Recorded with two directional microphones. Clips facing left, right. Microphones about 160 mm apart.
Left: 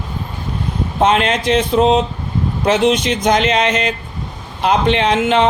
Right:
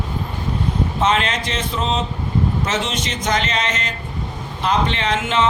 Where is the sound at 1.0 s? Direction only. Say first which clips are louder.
Left 7 dB; 55° left (ahead or behind).